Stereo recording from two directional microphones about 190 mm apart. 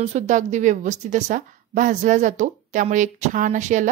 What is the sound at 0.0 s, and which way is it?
A woman's voice, 40° right (ahead or behind).